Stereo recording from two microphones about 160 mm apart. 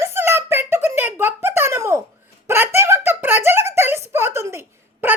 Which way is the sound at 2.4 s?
15° right (ahead or behind).